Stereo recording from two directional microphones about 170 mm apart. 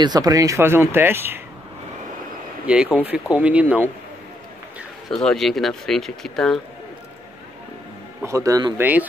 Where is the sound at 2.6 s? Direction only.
5° right (ahead or behind).